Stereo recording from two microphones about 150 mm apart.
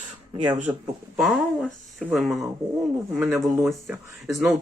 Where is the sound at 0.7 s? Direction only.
15° right (ahead or behind).